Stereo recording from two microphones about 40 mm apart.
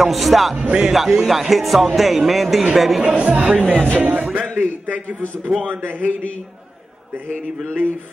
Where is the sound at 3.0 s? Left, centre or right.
Right.